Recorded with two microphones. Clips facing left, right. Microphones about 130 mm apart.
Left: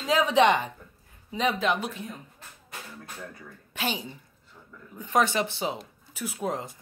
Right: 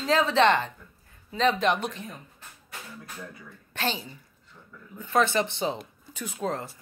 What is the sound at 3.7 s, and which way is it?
A woman's voice, 10° left (ahead or behind).